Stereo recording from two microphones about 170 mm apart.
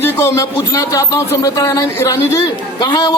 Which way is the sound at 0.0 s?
15° left (ahead or behind).